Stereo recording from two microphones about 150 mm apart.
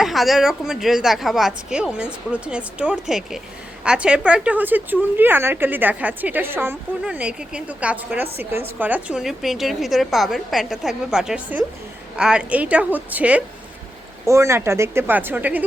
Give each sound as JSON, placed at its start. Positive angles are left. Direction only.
{"t": 0.0, "sound": "a woman's voice", "side_deg": 0}